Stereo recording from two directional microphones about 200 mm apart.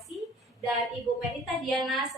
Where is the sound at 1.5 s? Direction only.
Centre (ahead or behind).